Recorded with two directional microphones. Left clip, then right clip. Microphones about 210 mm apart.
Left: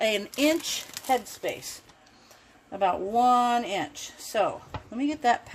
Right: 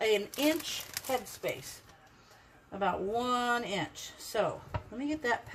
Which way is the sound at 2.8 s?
40° left (ahead or behind).